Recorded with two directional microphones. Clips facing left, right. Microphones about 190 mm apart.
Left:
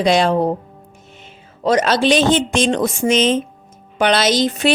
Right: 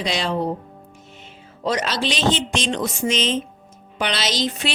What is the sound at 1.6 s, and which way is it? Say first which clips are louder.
Speech: left 8 dB; 50° left (ahead or behind).